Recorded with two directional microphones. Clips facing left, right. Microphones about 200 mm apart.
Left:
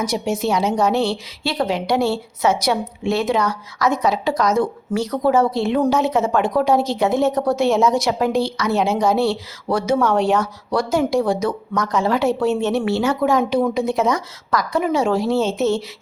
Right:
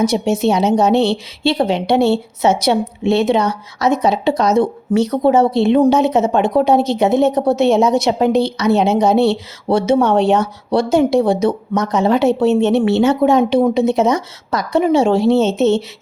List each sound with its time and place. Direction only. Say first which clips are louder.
0.0 s a woman's voice: right 6 dB; 25° right (ahead or behind)